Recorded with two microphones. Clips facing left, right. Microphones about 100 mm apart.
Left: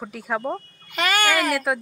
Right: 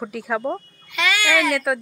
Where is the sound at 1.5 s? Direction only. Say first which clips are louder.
Right 1 dB; centre (ahead or behind).